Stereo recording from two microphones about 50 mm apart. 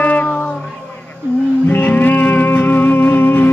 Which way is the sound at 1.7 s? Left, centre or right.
Left.